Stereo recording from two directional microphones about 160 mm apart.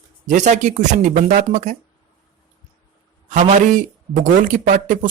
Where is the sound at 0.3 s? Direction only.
50° right (ahead or behind).